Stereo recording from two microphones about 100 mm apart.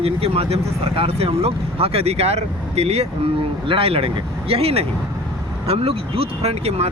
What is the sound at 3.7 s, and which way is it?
Speech, 70° right (ahead or behind).